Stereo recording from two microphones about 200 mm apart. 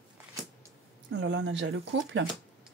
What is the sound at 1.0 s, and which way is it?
Speech, 65° right (ahead or behind).